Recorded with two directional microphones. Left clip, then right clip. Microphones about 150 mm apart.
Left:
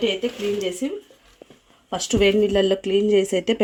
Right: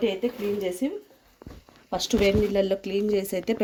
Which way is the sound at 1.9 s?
25° left (ahead or behind).